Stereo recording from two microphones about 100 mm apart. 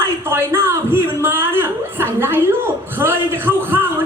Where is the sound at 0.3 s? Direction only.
25° right (ahead or behind).